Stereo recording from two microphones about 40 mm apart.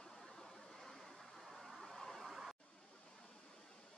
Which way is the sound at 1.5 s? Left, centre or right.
Centre.